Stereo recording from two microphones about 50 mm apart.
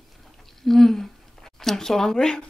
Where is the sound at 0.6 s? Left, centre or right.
Centre.